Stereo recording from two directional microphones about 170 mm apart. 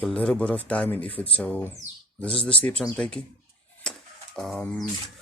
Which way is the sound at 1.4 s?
10° left (ahead or behind).